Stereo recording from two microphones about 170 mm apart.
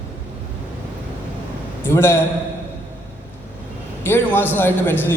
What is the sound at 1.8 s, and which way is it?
Speech, 15° left (ahead or behind).